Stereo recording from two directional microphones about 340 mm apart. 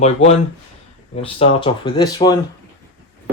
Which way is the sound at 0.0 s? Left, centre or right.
Centre.